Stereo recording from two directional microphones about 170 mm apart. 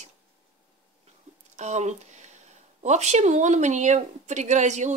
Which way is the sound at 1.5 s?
45° right (ahead or behind).